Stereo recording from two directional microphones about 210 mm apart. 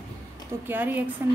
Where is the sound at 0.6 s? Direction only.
10° right (ahead or behind).